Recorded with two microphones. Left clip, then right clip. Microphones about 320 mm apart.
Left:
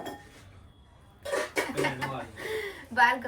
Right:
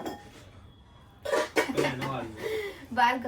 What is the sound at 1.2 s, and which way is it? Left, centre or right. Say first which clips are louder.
Cough: right 3 dB; right.